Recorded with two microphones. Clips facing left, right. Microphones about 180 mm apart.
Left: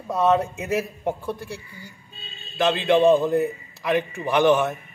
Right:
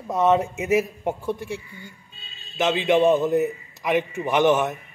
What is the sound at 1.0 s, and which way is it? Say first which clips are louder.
A man's voice: right 1 dB; 20° right (ahead or behind).